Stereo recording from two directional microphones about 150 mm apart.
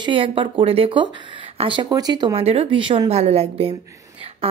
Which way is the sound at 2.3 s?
40° right (ahead or behind).